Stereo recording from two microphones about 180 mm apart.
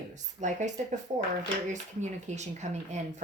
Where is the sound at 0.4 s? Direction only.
40° right (ahead or behind).